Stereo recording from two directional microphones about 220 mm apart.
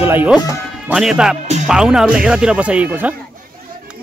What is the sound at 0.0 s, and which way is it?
A man's voice, 10° right (ahead or behind).